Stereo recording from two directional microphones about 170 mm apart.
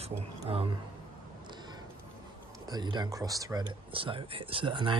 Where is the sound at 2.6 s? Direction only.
25° right (ahead or behind).